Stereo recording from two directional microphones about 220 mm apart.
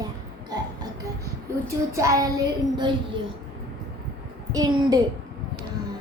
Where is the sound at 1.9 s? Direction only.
15° right (ahead or behind).